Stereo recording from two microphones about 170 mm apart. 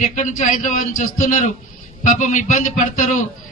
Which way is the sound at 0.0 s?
45° left (ahead or behind).